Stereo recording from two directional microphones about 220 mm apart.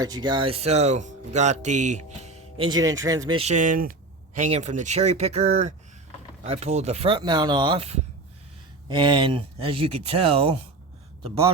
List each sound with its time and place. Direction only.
0.0 s speech: 20° right (ahead or behind)
2.6 s speech: 20° right (ahead or behind)